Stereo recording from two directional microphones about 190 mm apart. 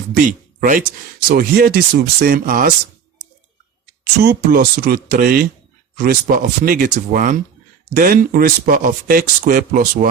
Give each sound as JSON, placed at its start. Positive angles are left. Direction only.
{"t": 0.3, "sound": "speech", "side_deg": -45}
{"t": 4.2, "sound": "speech", "side_deg": -55}